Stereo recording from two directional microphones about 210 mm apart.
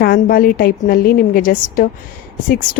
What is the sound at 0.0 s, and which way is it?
Speech, 45° left (ahead or behind).